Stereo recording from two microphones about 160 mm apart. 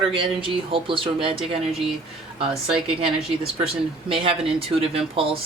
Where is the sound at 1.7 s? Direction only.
Centre (ahead or behind).